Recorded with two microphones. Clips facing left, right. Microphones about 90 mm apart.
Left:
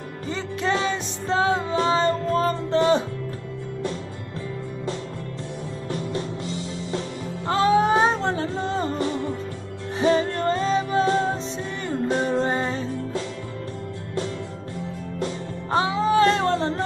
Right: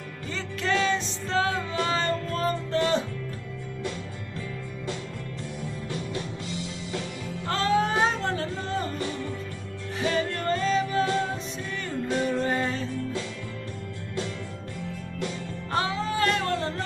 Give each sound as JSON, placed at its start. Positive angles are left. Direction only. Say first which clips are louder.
{"t": 0.3, "sound": "music", "louder": "left 3 dB", "side_deg": 20}
{"t": 5.9, "sound": "music", "louder": "left 6 dB", "side_deg": 30}
{"t": 7.4, "sound": "music", "louder": "left 6 dB", "side_deg": 20}
{"t": 15.1, "sound": "music", "louder": "left 4 dB", "side_deg": 25}